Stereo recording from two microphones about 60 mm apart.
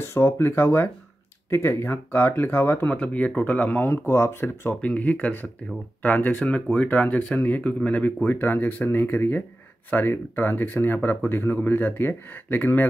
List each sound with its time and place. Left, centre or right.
0.0 s speech: left
2.9 s speech: left
3.8 s speech: left
4.8 s speech: left